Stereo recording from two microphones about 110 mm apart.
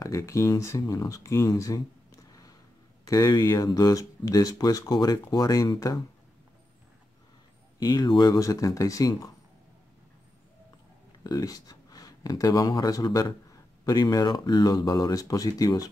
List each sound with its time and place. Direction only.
0.0 s speech: 30° left (ahead or behind)
3.1 s speech: 35° left (ahead or behind)
7.8 s speech: 40° left (ahead or behind)
11.2 s speech: 35° left (ahead or behind)